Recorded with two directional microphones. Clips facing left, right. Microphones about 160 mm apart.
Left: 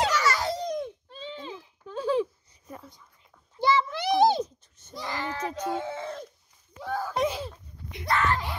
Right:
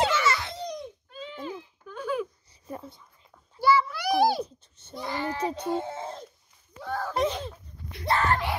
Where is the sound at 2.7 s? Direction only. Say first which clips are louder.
Right 5 dB; 30° right (ahead or behind).